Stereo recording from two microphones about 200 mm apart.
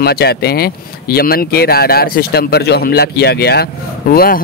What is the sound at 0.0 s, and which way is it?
Speech, 50° left (ahead or behind).